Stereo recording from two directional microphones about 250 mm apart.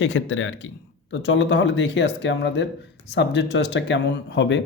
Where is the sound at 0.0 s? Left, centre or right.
Left.